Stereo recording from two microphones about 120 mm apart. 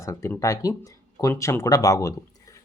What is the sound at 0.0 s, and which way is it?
Speech, 25° left (ahead or behind).